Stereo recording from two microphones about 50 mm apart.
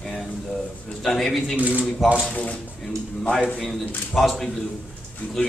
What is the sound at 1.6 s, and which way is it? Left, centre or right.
Speech, right.